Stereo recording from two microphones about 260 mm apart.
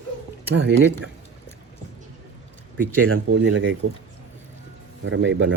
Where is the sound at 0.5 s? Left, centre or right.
Right.